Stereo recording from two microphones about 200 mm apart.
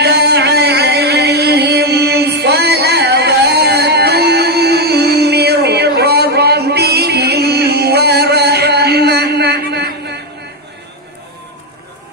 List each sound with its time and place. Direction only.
0.0 s music: 55° right (ahead or behind)